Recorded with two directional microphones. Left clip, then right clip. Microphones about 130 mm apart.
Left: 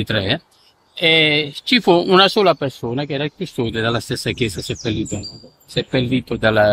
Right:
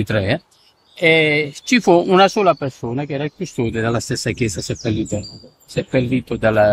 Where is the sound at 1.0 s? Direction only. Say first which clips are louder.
Even; 30° right (ahead or behind).